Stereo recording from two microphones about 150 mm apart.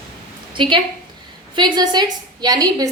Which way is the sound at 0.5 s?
35° right (ahead or behind).